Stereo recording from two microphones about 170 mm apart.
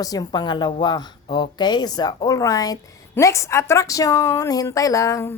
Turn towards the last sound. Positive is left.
turn(degrees=15)  # may be behind; listen again after turning